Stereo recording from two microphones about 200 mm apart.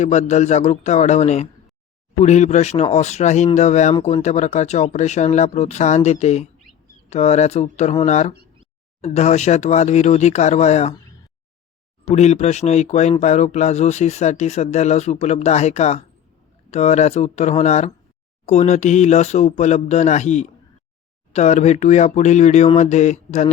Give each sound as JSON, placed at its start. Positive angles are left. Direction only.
{"t": 0.0, "sound": "speech", "side_deg": 35}
{"t": 12.0, "sound": "speech", "side_deg": 35}